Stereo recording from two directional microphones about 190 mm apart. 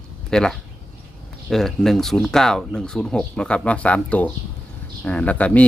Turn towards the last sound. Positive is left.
turn(degrees=5)  # may be behind; listen again after turning